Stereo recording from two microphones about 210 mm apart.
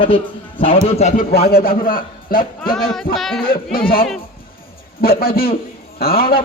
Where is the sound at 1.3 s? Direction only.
45° left (ahead or behind).